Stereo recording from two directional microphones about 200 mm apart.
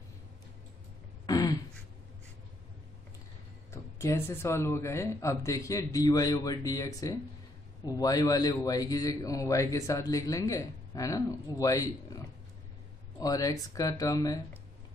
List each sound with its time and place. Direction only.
1.2 s throat clearing: 20° left (ahead or behind)
3.7 s a man's voice: 15° left (ahead or behind)
13.2 s a man's voice: 20° left (ahead or behind)